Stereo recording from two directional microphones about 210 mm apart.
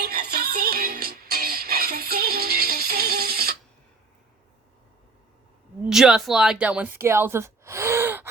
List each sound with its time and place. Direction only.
0.0 s music: 45° right (ahead or behind)
5.8 s speech: 5° right (ahead or behind)